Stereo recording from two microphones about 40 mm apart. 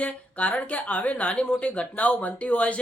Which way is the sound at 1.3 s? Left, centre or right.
Left.